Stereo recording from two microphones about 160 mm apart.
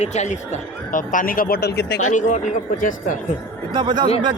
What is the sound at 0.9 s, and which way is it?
Speech, 60° left (ahead or behind).